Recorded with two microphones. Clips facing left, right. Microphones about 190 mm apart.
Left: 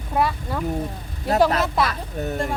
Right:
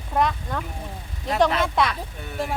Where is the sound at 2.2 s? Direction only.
40° left (ahead or behind).